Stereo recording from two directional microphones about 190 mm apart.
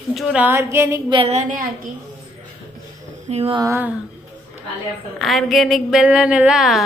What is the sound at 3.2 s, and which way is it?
Speech, 30° right (ahead or behind).